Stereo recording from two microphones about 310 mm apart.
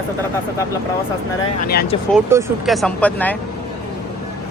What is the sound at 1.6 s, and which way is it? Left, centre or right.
Speech, left.